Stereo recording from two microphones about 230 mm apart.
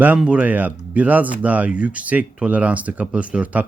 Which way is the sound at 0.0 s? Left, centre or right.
Centre.